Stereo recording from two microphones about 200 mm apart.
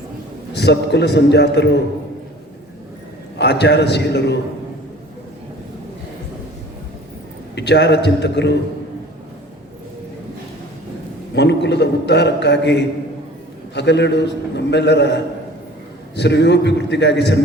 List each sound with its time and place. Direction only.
0.5 s a man's voice: 60° left (ahead or behind)
3.3 s a man's voice: 60° left (ahead or behind)
7.5 s a man's voice: 60° left (ahead or behind)
11.3 s a man's voice: 60° left (ahead or behind)